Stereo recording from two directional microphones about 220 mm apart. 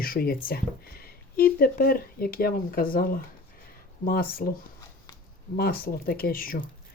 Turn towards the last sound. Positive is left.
turn(degrees=40)  # may be behind; listen again after turning